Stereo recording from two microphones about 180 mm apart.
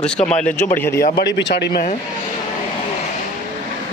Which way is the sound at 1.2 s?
75° left (ahead or behind).